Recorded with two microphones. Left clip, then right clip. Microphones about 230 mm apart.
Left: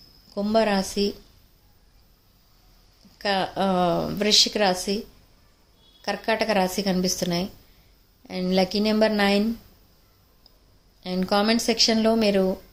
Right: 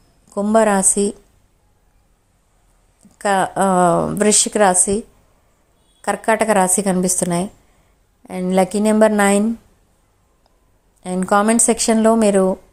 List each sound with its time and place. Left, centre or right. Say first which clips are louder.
0.3 s a woman's voice: right 7 dB; right
3.2 s a woman's voice: right 8 dB; right
6.1 s a woman's voice: right 8 dB; right
7.0 s a woman's voice: right 6 dB; right
11.0 s a woman's voice: right 7 dB; right